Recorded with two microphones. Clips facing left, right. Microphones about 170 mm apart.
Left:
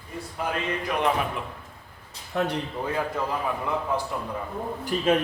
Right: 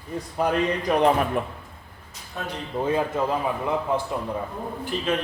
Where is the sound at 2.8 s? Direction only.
20° right (ahead or behind).